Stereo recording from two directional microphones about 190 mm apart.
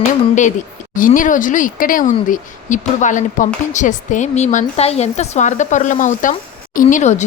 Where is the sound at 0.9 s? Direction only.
45° left (ahead or behind).